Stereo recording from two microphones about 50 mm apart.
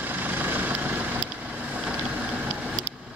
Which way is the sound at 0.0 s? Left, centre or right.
Right.